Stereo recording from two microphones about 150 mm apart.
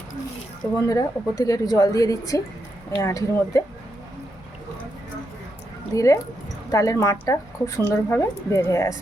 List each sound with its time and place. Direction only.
0.6 s a woman's voice: 25° left (ahead or behind)
5.9 s a woman's voice: 20° left (ahead or behind)